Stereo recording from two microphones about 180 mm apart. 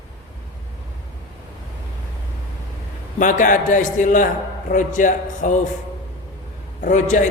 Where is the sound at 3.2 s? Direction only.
45° left (ahead or behind).